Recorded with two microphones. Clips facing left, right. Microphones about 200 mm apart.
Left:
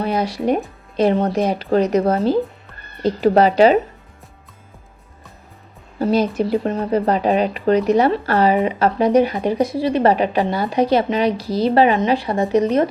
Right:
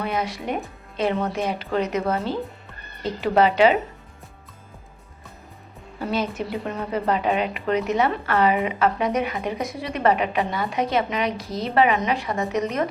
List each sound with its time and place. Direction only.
0.0 s speech: 35° left (ahead or behind)
6.0 s speech: 35° left (ahead or behind)